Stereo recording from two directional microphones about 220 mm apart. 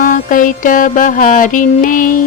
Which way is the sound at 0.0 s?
35° left (ahead or behind).